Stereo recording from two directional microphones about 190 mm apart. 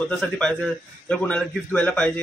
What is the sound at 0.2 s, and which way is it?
Speech, 5° left (ahead or behind).